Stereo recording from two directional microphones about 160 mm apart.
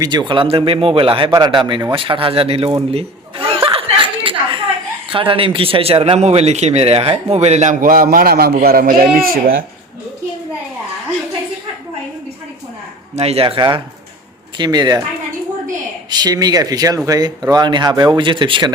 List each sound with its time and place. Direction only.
0.0 s speech: 25° right (ahead or behind)
2.9 s chuckle: 35° right (ahead or behind)
5.1 s speech: 35° right (ahead or behind); by 8.5 s 75° right (ahead or behind)
8.5 s a man's voice: 65° right (ahead or behind)
13.1 s speech: 40° right (ahead or behind)
16.0 s speech: 25° right (ahead or behind)